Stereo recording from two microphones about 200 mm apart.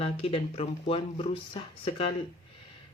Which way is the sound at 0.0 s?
30° left (ahead or behind).